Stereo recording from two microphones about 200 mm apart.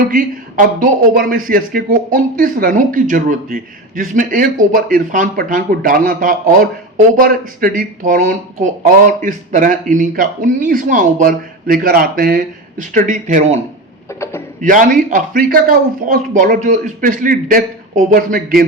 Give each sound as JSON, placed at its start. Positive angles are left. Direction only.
{"t": 0.1, "sound": "a man's voice", "side_deg": -45}
{"t": 14.6, "sound": "a man's voice", "side_deg": -40}